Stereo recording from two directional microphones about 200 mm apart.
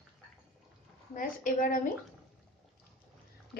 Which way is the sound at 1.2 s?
40° left (ahead or behind).